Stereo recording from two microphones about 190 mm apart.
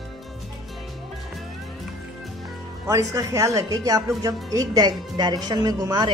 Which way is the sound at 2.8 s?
20° right (ahead or behind).